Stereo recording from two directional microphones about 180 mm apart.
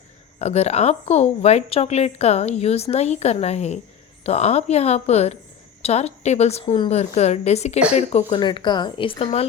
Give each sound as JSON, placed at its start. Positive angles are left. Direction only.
{"t": 0.3, "sound": "speech", "side_deg": 35}
{"t": 8.3, "sound": "speech", "side_deg": 25}